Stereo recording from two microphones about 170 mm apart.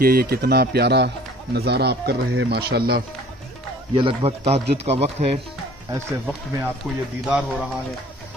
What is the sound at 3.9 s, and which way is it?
Speech, 35° right (ahead or behind).